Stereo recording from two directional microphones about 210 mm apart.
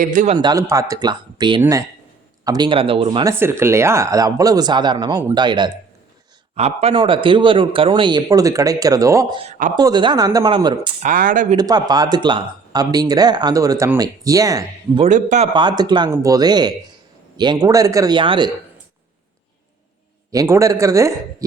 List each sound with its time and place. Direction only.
0.0 s speech: 40° right (ahead or behind)
0.3 s speech: 15° right (ahead or behind)
3.3 s speech: 10° right (ahead or behind)
9.4 s speech: 35° right (ahead or behind)
9.7 s speech: 20° right (ahead or behind)
11.0 s speech: 40° right (ahead or behind)
11.5 s speech: 20° right (ahead or behind)
15.0 s speech: 35° right (ahead or behind)
15.5 s speech: 20° right (ahead or behind)
20.3 s speech: 15° right (ahead or behind)